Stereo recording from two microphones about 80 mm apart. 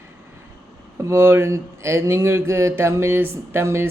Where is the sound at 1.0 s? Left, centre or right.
Right.